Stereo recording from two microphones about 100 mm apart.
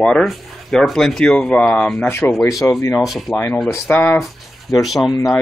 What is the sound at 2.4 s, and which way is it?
Speech, 30° left (ahead or behind).